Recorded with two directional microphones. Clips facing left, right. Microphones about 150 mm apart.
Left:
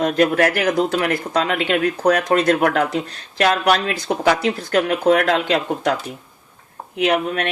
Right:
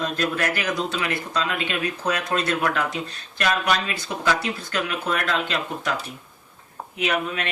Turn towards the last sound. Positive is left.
turn(degrees=60)  # may be behind; listen again after turning